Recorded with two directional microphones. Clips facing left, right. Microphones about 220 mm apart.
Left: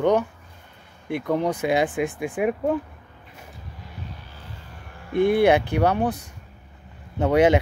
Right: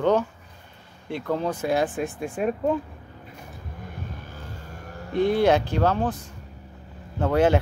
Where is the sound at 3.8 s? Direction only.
45° right (ahead or behind).